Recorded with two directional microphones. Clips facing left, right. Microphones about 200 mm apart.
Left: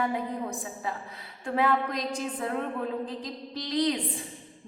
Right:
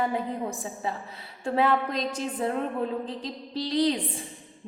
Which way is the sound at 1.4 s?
25° right (ahead or behind).